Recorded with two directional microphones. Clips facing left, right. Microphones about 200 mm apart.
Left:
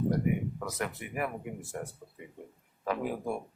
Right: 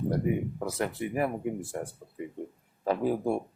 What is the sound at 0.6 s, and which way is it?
Speech, 30° right (ahead or behind).